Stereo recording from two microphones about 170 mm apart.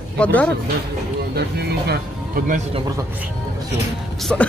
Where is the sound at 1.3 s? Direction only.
70° right (ahead or behind); by 2.6 s 55° right (ahead or behind).